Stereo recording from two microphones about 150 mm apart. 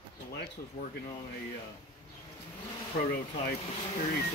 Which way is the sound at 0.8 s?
50° left (ahead or behind).